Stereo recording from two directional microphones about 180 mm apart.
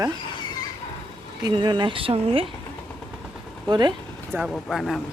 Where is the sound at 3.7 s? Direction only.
25° right (ahead or behind).